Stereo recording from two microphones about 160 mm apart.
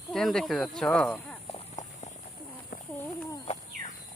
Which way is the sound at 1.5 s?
45° left (ahead or behind).